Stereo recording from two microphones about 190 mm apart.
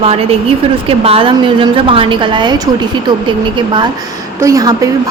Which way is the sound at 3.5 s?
25° right (ahead or behind).